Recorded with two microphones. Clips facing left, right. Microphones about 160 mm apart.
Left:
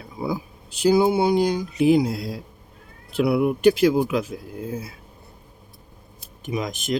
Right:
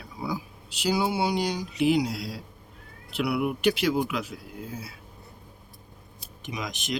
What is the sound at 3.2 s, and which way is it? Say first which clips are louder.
Speech: left 7 dB; 30° left (ahead or behind).